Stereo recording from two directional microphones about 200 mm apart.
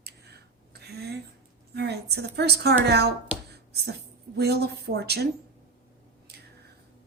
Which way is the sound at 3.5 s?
55° right (ahead or behind).